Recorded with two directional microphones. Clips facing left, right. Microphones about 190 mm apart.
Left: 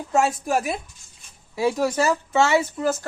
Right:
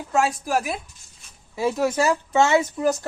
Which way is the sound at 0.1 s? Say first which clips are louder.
Left 1 dB; centre (ahead or behind).